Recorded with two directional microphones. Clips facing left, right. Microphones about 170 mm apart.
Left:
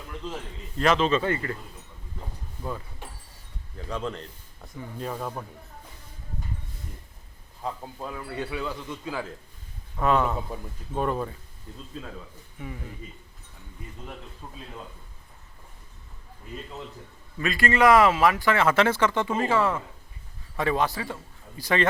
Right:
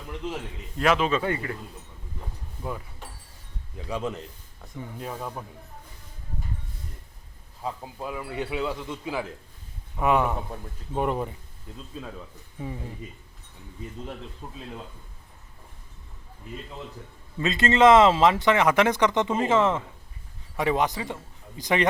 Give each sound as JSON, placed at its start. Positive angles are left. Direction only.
{"t": 0.8, "sound": "a man's voice", "side_deg": -5}
{"t": 3.8, "sound": "a man's voice", "side_deg": -5}
{"t": 7.6, "sound": "a man's voice", "side_deg": -5}
{"t": 12.5, "sound": "speech", "side_deg": -30}
{"t": 17.4, "sound": "a man's voice", "side_deg": -20}